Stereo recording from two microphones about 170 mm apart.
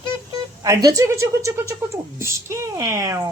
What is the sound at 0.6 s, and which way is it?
A woman's voice, 20° right (ahead or behind).